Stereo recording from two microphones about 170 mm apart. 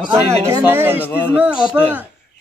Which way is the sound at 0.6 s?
10° right (ahead or behind).